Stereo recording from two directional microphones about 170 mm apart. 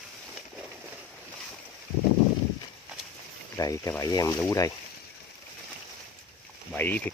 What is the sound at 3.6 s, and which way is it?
Speech, 20° left (ahead or behind).